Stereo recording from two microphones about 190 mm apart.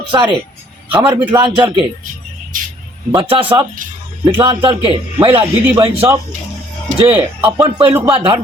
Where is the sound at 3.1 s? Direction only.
25° right (ahead or behind).